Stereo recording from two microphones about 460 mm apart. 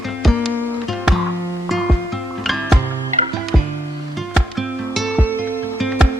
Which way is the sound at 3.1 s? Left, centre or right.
Centre.